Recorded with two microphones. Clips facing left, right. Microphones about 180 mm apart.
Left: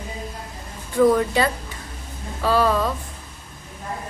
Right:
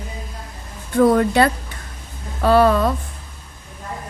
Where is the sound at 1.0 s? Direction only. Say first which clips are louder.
Right 3 dB; 60° right (ahead or behind).